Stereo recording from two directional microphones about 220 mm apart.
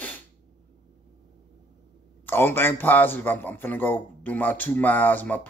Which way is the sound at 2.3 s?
10° left (ahead or behind).